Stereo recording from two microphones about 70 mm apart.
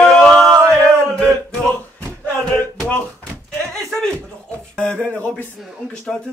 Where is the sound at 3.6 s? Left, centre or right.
Centre.